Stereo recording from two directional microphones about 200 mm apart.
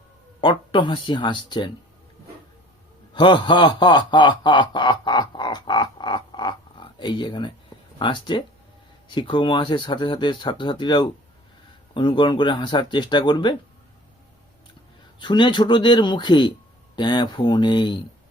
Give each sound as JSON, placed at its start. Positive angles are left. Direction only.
{"t": 0.4, "sound": "speech", "side_deg": 25}
{"t": 3.1, "sound": "snicker", "side_deg": 25}
{"t": 7.9, "sound": "speech", "side_deg": 25}
{"t": 15.2, "sound": "speech", "side_deg": 25}